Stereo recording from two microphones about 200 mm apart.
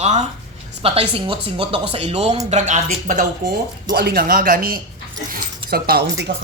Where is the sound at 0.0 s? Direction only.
35° right (ahead or behind).